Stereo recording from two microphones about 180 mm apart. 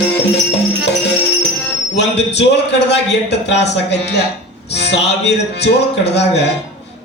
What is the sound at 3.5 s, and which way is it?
A man's voice, 70° left (ahead or behind).